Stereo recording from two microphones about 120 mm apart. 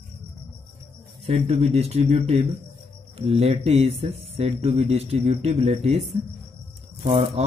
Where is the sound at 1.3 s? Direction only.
60° right (ahead or behind).